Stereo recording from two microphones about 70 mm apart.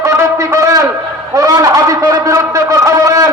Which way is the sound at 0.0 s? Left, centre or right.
Right.